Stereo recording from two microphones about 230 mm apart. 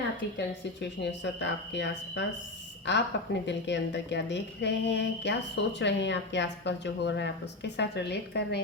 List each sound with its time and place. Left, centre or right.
0.3 s speech: left